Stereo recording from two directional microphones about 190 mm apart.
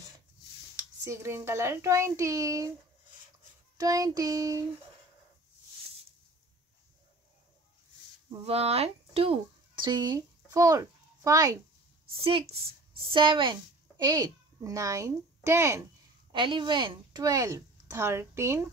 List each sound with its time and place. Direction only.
1.0 s speech: 15° right (ahead or behind)
3.7 s child singing: 20° right (ahead or behind)
8.3 s speech: 30° right (ahead or behind)
12.1 s speech: 30° right (ahead or behind); by 15.8 s 15° right (ahead or behind)
16.3 s a woman's voice: 25° right (ahead or behind)